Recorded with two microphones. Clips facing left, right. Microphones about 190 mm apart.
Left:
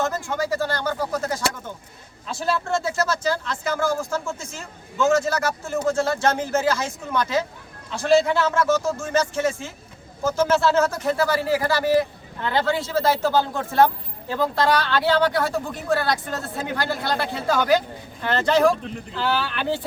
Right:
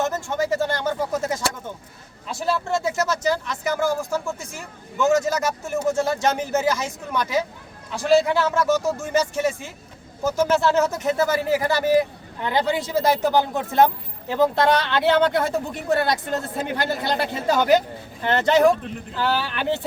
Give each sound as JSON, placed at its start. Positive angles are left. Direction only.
{"t": 0.0, "sound": "speech", "side_deg": -20}